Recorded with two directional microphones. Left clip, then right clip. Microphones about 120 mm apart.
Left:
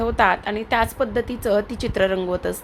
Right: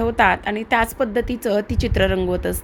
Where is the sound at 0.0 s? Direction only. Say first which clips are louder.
Right 1 dB; 40° right (ahead or behind).